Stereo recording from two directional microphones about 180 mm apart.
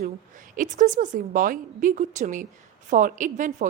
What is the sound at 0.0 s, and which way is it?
A woman's voice, 45° right (ahead or behind).